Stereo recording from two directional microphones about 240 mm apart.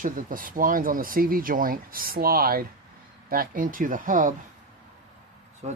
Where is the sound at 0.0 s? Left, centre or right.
Right.